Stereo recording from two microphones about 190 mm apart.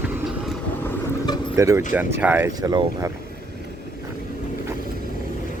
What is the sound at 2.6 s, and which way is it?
Speech, 20° right (ahead or behind).